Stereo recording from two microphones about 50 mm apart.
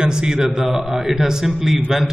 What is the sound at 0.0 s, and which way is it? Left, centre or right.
A man's voice, centre.